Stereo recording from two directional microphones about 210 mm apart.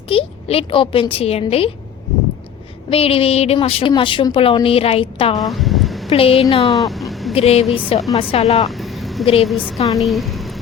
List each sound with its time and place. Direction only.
0.1 s a woman's voice: 25° left (ahead or behind)
2.9 s a woman's voice: 25° left (ahead or behind)
5.5 s a sound: centre (ahead or behind)
6.1 s a woman's voice: 25° left (ahead or behind)
6.8 s a sound: centre (ahead or behind)
7.3 s a woman's voice: 30° left (ahead or behind)
8.7 s vehicle: centre (ahead or behind)
9.2 s a woman's voice: 25° left (ahead or behind)
9.5 s a woman's voice: centre (ahead or behind)
10.0 s a sound: centre (ahead or behind)